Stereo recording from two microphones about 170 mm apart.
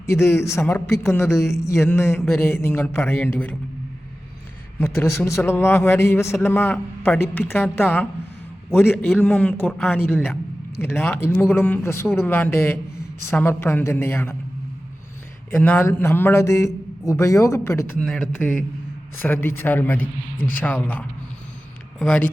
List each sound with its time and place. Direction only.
0.0 s speech: 15° left (ahead or behind)
4.8 s speech: 15° left (ahead or behind)
15.4 s speech: 10° left (ahead or behind)
18.0 s speech: 5° left (ahead or behind)